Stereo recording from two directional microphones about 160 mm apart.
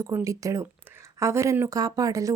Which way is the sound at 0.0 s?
15° right (ahead or behind).